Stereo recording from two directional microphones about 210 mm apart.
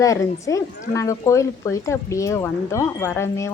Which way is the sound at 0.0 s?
15° left (ahead or behind).